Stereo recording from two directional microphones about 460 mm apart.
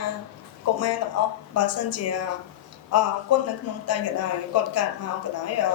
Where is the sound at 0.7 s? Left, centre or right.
Left.